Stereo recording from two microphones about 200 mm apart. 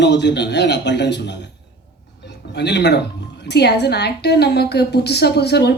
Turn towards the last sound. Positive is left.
turn(degrees=55)  # may be behind; listen again after turning